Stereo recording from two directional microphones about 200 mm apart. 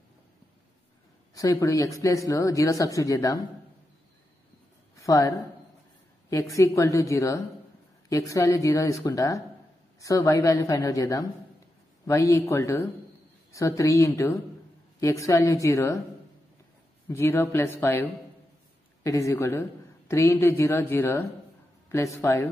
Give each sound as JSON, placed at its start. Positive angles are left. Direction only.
{"t": 1.3, "sound": "speech", "side_deg": 15}
{"t": 4.9, "sound": "speech", "side_deg": 15}
{"t": 6.3, "sound": "speech", "side_deg": 15}
{"t": 17.1, "sound": "speech", "side_deg": 10}
{"t": 19.0, "sound": "speech", "side_deg": 15}